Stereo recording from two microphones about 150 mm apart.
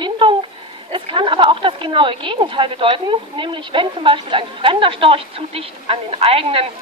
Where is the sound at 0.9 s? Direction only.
35° right (ahead or behind).